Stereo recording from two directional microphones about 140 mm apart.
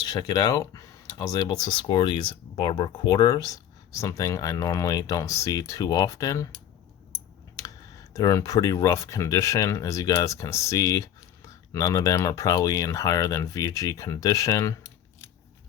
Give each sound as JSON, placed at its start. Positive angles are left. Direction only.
{"t": 0.1, "sound": "speech", "side_deg": 25}
{"t": 8.1, "sound": "speech", "side_deg": 20}